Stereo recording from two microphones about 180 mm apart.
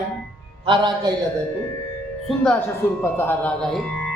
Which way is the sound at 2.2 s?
5° left (ahead or behind).